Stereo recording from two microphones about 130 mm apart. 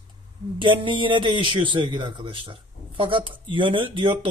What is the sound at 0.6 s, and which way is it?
A man's voice, 40° right (ahead or behind).